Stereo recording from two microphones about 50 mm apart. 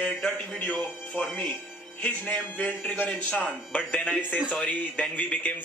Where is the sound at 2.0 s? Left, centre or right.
Left.